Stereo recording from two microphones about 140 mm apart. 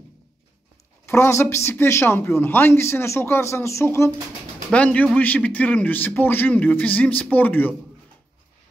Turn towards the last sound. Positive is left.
turn(degrees=10)  # may be behind; listen again after turning